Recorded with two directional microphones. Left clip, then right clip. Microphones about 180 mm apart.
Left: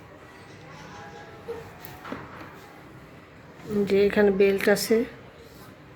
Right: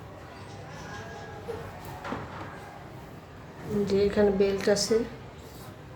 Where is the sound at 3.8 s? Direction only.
35° left (ahead or behind).